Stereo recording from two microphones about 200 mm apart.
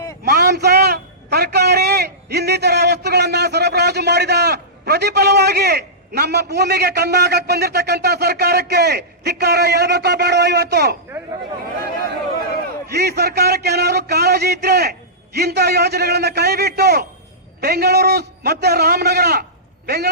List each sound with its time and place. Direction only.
0.3 s a man's voice: 55° right (ahead or behind)
12.9 s a man's voice: 55° right (ahead or behind)